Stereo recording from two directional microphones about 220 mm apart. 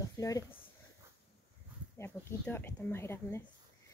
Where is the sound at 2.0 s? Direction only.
10° left (ahead or behind).